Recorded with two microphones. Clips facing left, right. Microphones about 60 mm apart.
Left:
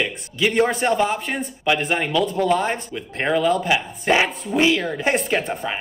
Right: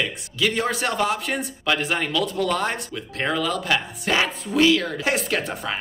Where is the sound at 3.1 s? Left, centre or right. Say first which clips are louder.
Left 5 dB; left.